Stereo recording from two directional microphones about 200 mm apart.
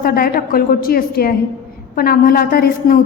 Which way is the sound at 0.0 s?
50° left (ahead or behind).